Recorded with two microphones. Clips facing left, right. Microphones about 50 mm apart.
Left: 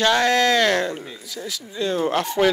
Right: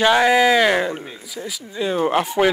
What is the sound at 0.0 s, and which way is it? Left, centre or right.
Speech, centre.